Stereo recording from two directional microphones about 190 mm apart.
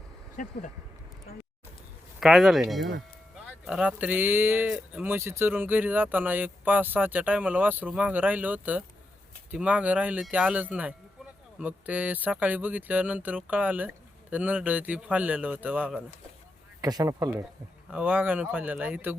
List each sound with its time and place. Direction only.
0.4 s speech: 45° left (ahead or behind)
2.2 s speech: centre (ahead or behind)
16.8 s speech: 20° right (ahead or behind)